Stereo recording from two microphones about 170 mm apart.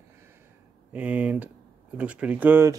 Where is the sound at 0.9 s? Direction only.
10° right (ahead or behind).